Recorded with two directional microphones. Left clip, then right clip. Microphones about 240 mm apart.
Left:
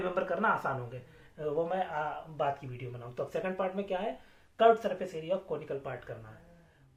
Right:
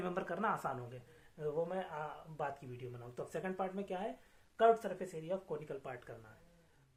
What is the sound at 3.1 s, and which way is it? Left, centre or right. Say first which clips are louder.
Speech: left 8 dB; right.